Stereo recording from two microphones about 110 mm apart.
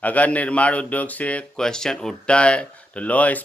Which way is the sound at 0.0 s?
15° left (ahead or behind).